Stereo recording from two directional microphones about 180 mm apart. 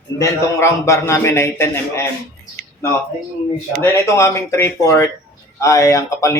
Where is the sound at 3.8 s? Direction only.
15° left (ahead or behind).